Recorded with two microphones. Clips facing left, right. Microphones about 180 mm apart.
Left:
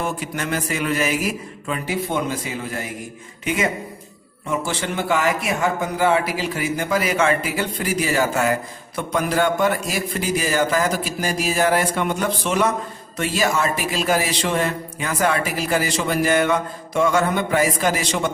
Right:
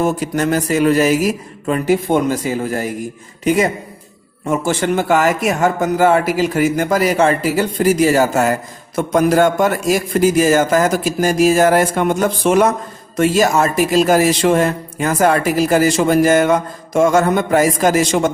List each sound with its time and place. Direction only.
0.0 s a man's voice: 40° right (ahead or behind)